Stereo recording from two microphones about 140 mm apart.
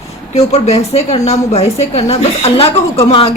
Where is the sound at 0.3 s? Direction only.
50° left (ahead or behind).